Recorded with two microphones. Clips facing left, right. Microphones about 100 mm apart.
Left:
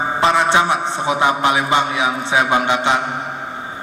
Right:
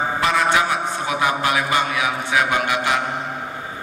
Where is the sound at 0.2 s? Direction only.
25° left (ahead or behind).